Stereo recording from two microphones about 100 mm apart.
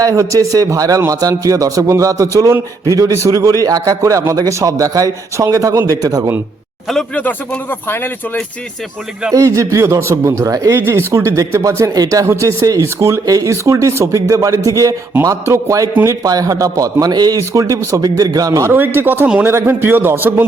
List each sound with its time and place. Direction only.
0.0 s speech: 35° right (ahead or behind)
7.2 s speech: 15° left (ahead or behind)
9.3 s speech: 30° right (ahead or behind)
18.7 s a man's voice: 20° right (ahead or behind)